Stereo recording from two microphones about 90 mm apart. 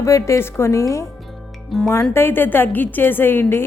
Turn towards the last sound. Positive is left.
turn(degrees=25)  # may be behind; listen again after turning